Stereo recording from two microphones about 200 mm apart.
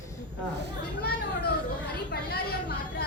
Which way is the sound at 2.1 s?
50° left (ahead or behind).